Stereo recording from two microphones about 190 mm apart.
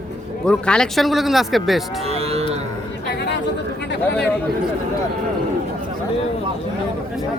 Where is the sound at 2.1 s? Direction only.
35° right (ahead or behind).